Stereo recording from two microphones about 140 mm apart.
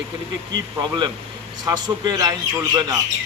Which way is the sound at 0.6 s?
30° right (ahead or behind).